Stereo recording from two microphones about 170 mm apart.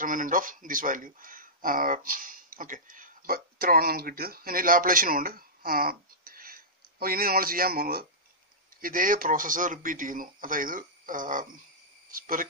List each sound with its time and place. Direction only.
0.0 s speech: 50° right (ahead or behind)